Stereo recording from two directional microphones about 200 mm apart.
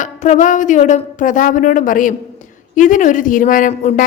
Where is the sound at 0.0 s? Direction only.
35° left (ahead or behind).